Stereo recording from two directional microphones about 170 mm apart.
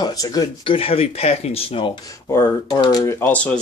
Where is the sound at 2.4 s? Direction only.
20° left (ahead or behind).